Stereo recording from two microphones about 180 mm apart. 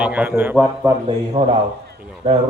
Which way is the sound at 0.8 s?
30° right (ahead or behind).